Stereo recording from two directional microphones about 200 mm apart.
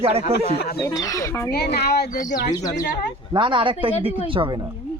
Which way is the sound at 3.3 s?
25° right (ahead or behind).